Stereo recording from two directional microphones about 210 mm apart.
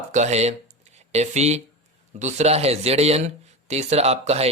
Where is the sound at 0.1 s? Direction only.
35° right (ahead or behind).